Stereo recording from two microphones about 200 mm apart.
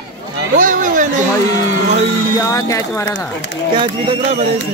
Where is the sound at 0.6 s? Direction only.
40° right (ahead or behind).